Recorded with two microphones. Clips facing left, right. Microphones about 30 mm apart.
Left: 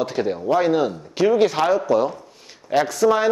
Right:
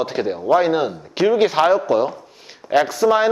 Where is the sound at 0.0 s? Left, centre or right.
Centre.